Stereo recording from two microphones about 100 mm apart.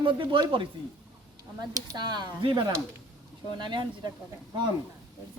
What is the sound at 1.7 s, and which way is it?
Speech, 40° right (ahead or behind).